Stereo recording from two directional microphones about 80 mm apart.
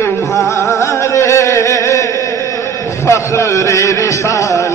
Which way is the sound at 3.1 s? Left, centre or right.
Left.